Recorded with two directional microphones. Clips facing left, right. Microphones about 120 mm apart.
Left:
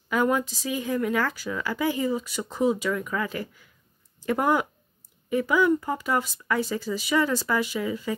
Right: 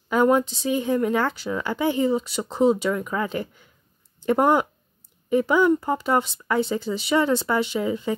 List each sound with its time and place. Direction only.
0.1 s speech: 30° right (ahead or behind)